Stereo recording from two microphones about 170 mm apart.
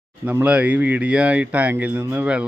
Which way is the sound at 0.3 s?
10° right (ahead or behind).